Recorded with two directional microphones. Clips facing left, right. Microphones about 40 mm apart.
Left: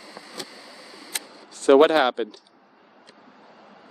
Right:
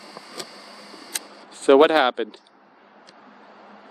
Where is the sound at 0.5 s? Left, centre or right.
Left.